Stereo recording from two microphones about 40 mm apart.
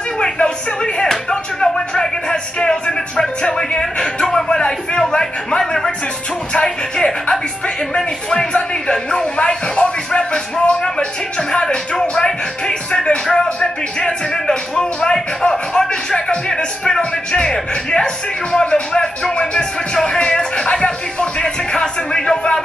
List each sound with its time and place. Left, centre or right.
0.9 s music: centre
5.6 s speech: centre
6.5 s speech: left
7.9 s speech: centre
8.9 s music: centre
14.8 s speech: centre